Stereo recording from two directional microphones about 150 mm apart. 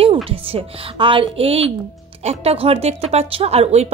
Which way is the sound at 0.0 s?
40° right (ahead or behind).